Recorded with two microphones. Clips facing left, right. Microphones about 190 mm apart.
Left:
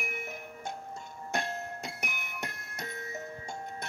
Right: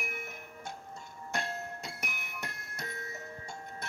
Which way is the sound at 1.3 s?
20° left (ahead or behind).